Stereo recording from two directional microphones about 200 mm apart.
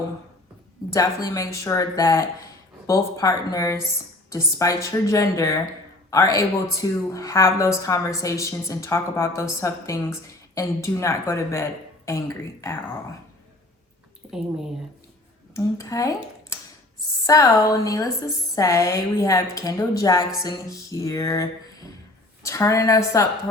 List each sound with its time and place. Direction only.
0.9 s speech: 15° left (ahead or behind)
14.2 s a sound: centre (ahead or behind)
15.5 s speech: 15° left (ahead or behind)
22.4 s speech: 15° left (ahead or behind)